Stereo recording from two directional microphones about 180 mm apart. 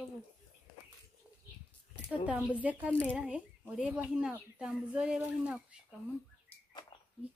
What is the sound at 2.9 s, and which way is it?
Speech, 10° left (ahead or behind).